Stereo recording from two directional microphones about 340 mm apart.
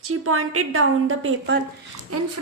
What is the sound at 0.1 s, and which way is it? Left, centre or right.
A woman's voice, right.